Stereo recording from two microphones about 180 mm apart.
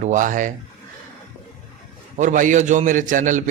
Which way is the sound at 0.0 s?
45° right (ahead or behind).